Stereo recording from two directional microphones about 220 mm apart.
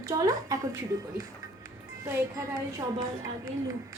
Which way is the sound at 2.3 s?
15° right (ahead or behind).